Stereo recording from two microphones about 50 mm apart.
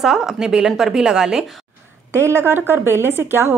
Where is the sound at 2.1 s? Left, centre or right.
Right.